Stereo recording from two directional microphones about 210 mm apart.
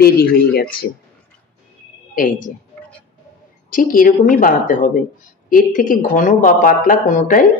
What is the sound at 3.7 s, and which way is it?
Speech, 40° left (ahead or behind).